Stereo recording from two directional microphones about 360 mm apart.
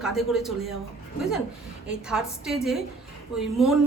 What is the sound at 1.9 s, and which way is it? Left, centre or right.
Speech, centre.